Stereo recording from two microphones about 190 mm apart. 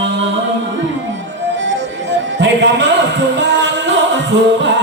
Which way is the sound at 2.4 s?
70° right (ahead or behind).